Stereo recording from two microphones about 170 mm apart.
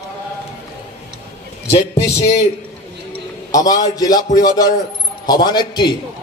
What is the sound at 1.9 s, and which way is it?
Speech, 40° left (ahead or behind).